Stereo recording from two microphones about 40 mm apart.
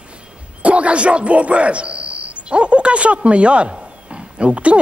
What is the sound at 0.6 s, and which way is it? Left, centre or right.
Speech, right.